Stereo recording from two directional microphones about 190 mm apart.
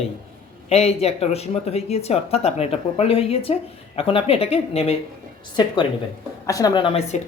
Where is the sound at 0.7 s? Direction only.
35° left (ahead or behind).